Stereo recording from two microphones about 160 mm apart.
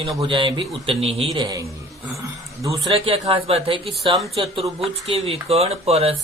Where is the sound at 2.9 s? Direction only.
40° right (ahead or behind).